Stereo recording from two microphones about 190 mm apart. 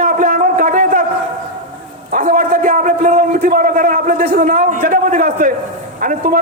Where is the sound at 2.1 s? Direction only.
45° right (ahead or behind).